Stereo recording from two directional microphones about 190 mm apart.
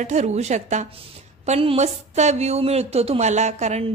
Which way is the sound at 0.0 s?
40° right (ahead or behind).